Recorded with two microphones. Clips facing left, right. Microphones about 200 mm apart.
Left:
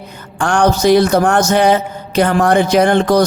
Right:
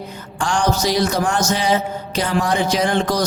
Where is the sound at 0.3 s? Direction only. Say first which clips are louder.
Left 6 dB; 60° left (ahead or behind).